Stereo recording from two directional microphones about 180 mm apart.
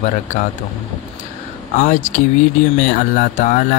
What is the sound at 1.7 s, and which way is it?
Speech, 40° left (ahead or behind).